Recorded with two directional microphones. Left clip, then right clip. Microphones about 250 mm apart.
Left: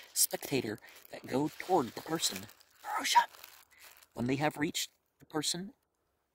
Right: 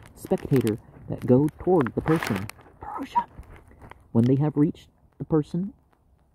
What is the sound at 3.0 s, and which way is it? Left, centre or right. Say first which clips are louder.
Speech: right 1 dB; left.